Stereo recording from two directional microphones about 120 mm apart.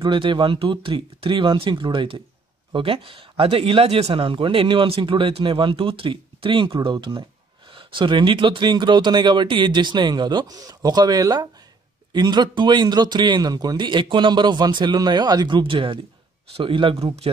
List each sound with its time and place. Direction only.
0.0 s speech: 40° right (ahead or behind)